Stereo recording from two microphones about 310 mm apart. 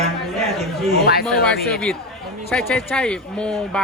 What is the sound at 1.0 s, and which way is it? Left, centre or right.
Speech, left.